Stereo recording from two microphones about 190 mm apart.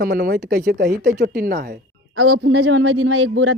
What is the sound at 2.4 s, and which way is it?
Speech, 90° right.